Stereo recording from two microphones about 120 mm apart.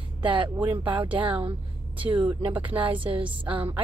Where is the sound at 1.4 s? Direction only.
45° right (ahead or behind).